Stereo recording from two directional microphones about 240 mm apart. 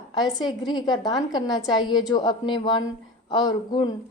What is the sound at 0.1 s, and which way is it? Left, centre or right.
A woman's voice, centre.